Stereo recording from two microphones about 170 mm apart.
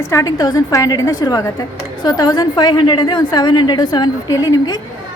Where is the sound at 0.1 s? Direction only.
20° left (ahead or behind).